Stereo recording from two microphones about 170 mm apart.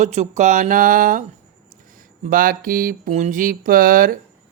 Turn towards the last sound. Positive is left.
turn(degrees=-55)  # may be behind; listen again after turning